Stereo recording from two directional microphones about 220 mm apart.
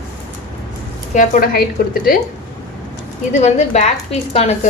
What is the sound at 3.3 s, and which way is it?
A woman's voice, 30° left (ahead or behind).